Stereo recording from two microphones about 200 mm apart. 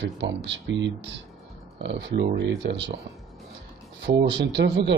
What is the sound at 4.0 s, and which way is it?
Speech, 60° right (ahead or behind).